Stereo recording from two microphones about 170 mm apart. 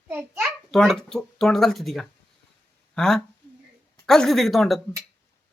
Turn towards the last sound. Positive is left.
turn(degrees=0)  # may be behind; listen again after turning